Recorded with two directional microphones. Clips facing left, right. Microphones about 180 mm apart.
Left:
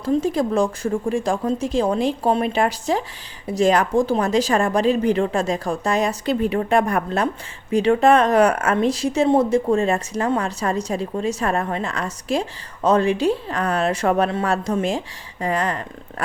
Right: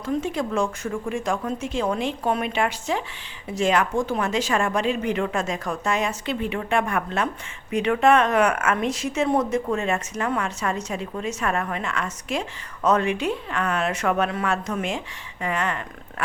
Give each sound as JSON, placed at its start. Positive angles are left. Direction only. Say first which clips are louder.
{"t": 0.0, "sound": "speech", "louder": "left 6 dB", "side_deg": 35}